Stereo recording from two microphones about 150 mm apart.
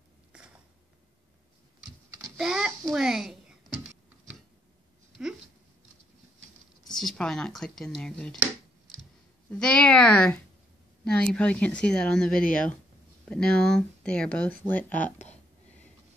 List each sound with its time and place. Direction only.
2.3 s a sound: 5° right (ahead or behind)
6.9 s speech: 5° left (ahead or behind)
9.5 s speech: 5° left (ahead or behind)
15.0 s speech: 55° left (ahead or behind)